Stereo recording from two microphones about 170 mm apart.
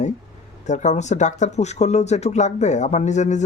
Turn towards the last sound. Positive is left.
turn(degrees=45)  # may be behind; listen again after turning